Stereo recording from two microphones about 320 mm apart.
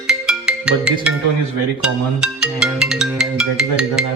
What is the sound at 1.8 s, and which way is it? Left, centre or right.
Music, centre.